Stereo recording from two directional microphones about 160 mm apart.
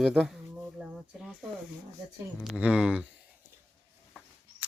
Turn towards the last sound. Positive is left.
turn(degrees=-5)  # may be behind; listen again after turning